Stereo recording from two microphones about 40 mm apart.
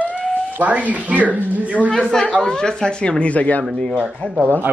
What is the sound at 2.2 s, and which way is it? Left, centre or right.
Speech, left.